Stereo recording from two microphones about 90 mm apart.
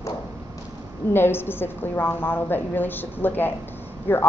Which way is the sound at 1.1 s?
25° left (ahead or behind).